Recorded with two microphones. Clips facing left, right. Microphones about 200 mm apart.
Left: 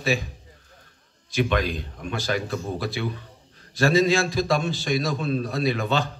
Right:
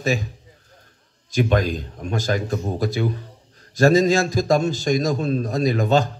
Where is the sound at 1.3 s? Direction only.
45° right (ahead or behind).